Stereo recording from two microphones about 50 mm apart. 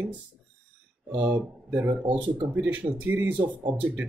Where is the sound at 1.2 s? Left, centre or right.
Right.